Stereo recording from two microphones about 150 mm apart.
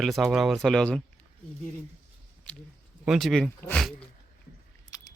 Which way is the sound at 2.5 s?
10° left (ahead or behind).